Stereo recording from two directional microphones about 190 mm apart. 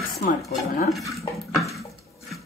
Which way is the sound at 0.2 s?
45° left (ahead or behind).